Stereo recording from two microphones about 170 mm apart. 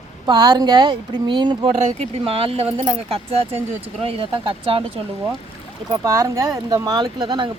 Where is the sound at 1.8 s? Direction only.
40° right (ahead or behind).